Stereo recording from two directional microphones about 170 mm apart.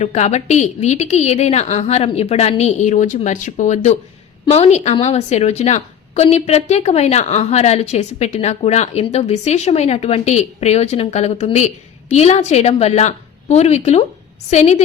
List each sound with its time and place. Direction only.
0.0 s a woman's voice: 40° left (ahead or behind)